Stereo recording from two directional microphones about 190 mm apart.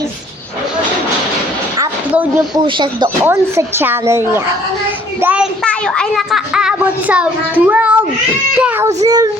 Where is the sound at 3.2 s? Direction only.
10° right (ahead or behind).